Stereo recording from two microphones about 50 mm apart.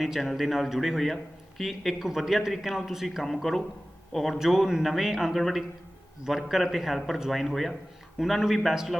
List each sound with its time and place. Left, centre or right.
0.0 s speech: centre
4.4 s speech: centre